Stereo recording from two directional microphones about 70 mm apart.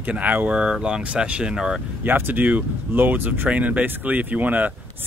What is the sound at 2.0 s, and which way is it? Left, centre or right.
Speech, right.